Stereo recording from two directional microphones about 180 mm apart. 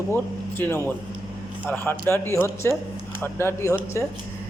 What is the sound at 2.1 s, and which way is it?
A man's voice, 15° left (ahead or behind).